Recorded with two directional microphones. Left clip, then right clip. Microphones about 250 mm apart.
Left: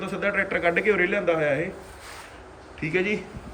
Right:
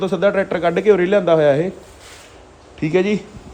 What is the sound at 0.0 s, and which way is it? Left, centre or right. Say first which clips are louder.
A man's voice: right 9 dB; centre.